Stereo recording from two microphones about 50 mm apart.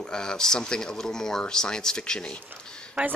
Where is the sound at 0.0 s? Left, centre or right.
Centre.